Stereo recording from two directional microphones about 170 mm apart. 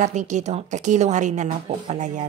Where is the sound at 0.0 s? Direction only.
45° right (ahead or behind).